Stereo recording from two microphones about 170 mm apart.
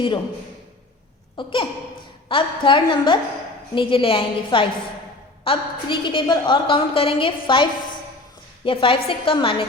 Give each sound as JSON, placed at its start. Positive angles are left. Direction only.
{"t": 1.4, "sound": "a woman's voice", "side_deg": 30}